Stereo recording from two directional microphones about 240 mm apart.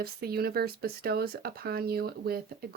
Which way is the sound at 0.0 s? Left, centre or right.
Right.